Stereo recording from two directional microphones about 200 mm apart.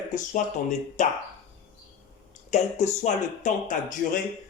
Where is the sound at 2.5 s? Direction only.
35° left (ahead or behind).